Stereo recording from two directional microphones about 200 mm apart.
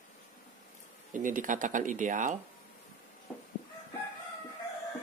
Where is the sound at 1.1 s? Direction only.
40° right (ahead or behind).